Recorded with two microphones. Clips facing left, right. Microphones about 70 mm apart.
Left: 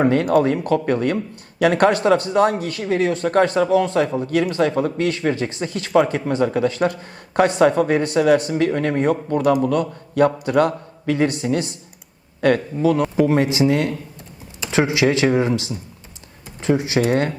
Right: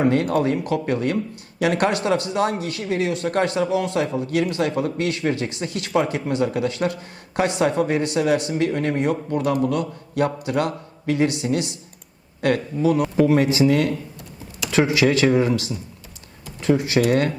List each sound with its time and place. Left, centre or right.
0.0 s a man's voice: left
13.2 s speech: left